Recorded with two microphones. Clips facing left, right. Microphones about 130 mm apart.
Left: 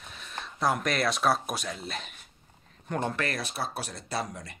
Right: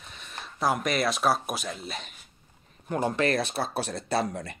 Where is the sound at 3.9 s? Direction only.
60° right (ahead or behind).